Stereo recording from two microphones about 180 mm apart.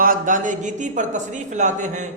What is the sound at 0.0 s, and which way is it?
A man's voice, 50° right (ahead or behind).